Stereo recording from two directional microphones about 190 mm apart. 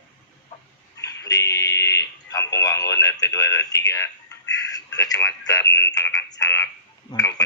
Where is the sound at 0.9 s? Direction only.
20° left (ahead or behind).